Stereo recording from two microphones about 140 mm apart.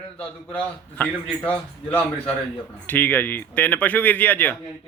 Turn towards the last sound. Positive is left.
turn(degrees=15)  # may be behind; listen again after turning